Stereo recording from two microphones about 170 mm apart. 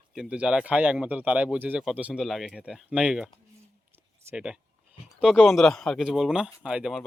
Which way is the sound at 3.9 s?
15° right (ahead or behind).